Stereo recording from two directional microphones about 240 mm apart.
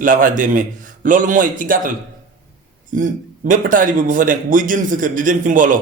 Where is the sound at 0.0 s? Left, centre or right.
Right.